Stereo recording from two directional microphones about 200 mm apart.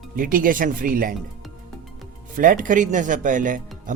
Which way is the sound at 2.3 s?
40° right (ahead or behind).